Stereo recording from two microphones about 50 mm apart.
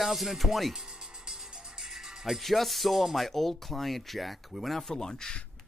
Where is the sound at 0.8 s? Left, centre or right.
Centre.